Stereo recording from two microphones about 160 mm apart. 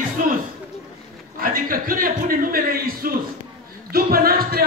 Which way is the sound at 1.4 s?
60° right (ahead or behind).